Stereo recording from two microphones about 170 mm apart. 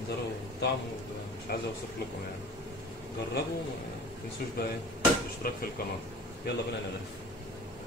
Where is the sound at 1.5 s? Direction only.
65° left (ahead or behind).